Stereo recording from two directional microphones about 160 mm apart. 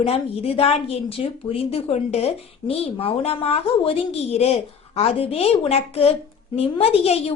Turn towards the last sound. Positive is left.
turn(degrees=40)  # may be behind; listen again after turning